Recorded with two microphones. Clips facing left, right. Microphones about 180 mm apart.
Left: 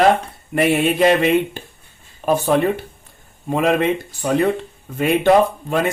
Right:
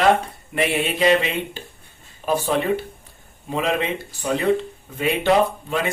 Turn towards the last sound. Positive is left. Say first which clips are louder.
# left 3 dB
turn(degrees=50)  # may be behind; listen again after turning